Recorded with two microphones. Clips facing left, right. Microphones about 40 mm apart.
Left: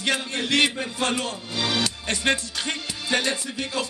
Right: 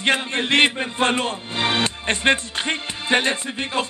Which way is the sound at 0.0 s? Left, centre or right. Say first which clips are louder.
Right 5 dB; right.